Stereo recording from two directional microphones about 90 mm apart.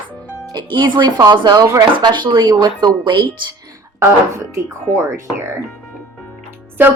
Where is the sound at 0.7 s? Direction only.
60° right (ahead or behind).